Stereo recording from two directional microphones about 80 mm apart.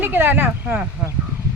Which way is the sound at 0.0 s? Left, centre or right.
Right.